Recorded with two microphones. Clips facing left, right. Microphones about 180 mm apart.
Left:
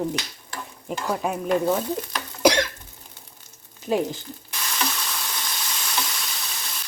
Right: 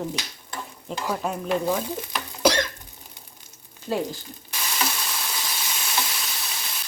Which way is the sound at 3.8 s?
15° left (ahead or behind).